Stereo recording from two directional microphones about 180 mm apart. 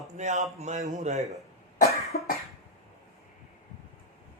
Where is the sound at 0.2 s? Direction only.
40° right (ahead or behind).